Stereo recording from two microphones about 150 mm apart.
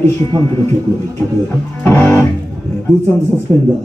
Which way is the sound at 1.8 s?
15° left (ahead or behind).